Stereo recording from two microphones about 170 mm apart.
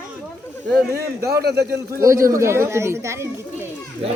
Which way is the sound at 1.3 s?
70° right (ahead or behind).